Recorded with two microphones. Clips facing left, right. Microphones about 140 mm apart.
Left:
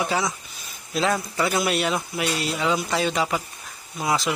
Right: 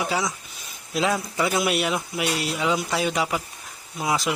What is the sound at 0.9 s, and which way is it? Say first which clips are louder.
Speech: even; 10° right (ahead or behind).